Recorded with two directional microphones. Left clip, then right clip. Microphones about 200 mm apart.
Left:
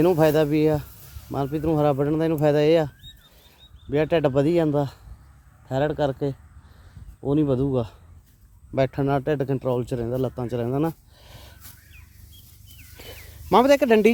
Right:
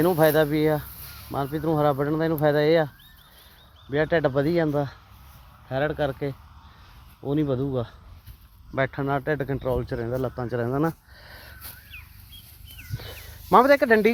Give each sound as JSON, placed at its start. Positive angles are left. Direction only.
{"t": 0.0, "sound": "speech", "side_deg": 35}
{"t": 3.9, "sound": "speech", "side_deg": 40}
{"t": 13.0, "sound": "a sound", "side_deg": 25}